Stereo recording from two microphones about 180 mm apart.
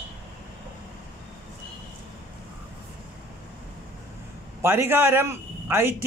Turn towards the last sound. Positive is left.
turn(degrees=-15)  # may be behind; listen again after turning